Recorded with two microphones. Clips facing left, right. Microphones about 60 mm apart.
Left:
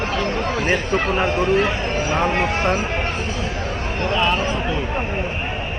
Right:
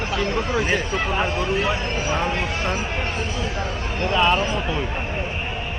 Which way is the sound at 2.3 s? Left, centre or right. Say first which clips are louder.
Left 5 dB; left.